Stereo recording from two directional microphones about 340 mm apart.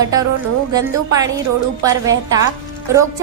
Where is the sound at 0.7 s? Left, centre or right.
Centre.